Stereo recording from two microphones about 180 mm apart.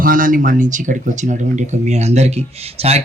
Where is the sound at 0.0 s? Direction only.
50° right (ahead or behind).